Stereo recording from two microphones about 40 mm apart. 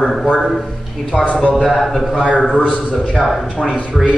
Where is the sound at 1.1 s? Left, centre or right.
Left.